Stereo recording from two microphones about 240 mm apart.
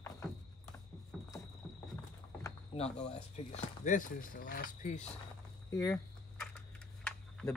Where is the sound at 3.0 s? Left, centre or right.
Left.